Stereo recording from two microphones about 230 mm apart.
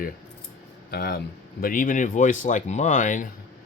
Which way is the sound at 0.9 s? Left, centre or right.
Left.